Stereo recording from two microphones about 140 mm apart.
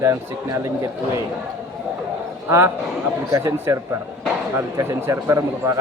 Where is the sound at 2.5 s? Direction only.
20° right (ahead or behind).